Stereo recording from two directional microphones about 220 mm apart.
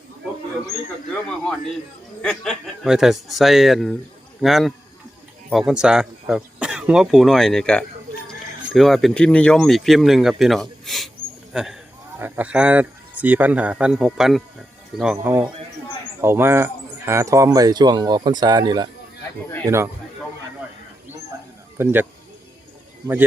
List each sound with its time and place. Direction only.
2.2 s speech: 5° left (ahead or behind)
21.8 s speech: 10° right (ahead or behind)